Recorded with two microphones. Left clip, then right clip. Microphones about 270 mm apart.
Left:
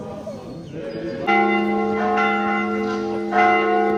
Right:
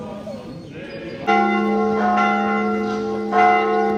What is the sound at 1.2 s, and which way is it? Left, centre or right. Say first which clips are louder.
Church bell: right 1 dB; right.